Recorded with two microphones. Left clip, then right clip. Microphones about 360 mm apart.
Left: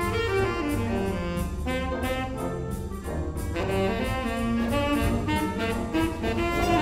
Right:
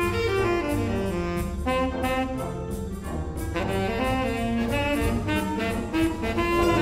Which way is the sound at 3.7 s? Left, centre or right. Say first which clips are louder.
Right 1 dB; right.